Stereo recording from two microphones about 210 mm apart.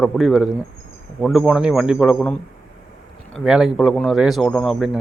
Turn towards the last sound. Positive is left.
turn(degrees=0)  # may be behind; listen again after turning